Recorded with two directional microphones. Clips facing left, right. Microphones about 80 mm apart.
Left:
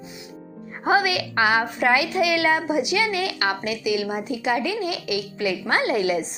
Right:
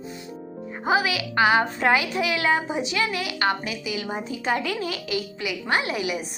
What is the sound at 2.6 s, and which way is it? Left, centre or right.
Speech, centre.